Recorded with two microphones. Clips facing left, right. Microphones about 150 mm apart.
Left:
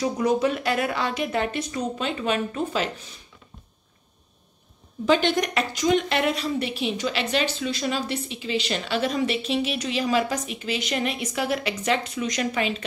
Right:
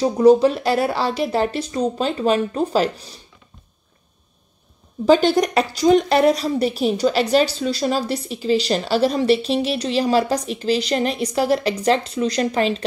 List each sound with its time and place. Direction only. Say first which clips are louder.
0.0 s speech: right 9 dB; 30° right (ahead or behind)
5.0 s speech: right 6 dB; 35° right (ahead or behind)